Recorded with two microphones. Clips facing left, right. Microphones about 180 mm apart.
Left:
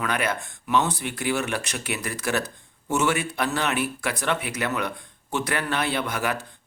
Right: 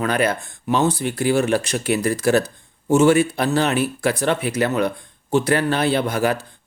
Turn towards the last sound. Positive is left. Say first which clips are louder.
# right 7 dB
turn(degrees=-30)  # may be behind; listen again after turning